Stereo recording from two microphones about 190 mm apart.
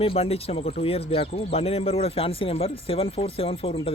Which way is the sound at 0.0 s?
30° left (ahead or behind).